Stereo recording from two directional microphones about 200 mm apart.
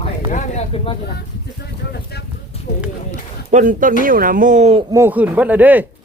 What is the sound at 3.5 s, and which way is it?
Speech, 40° right (ahead or behind).